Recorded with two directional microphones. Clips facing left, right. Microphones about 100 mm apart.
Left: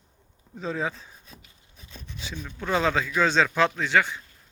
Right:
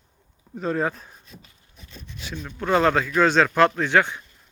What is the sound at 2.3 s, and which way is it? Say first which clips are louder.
Speech: right 5 dB; 5° right (ahead or behind).